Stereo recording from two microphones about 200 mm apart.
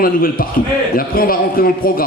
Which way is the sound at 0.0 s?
45° left (ahead or behind).